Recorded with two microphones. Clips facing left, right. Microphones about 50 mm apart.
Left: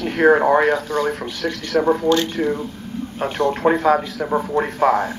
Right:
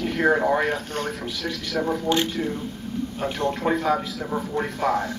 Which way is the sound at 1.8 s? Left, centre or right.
Left.